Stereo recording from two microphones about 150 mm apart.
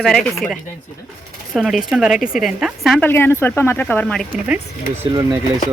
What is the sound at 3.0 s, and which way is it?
Speech, 15° left (ahead or behind).